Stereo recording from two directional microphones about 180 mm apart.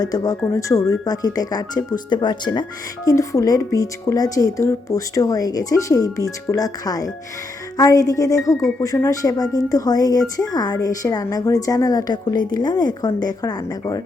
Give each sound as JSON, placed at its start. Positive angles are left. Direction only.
{"t": 0.0, "sound": "speech", "side_deg": 20}